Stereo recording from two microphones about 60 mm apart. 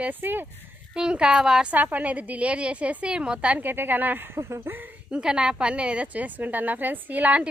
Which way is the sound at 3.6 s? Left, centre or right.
Right.